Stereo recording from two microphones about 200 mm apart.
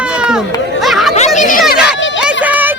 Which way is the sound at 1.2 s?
35° left (ahead or behind).